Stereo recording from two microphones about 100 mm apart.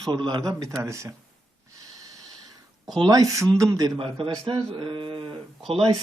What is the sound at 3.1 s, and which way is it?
Speech, 35° right (ahead or behind).